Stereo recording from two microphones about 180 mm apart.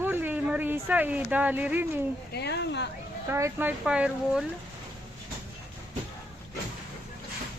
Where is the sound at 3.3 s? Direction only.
15° right (ahead or behind).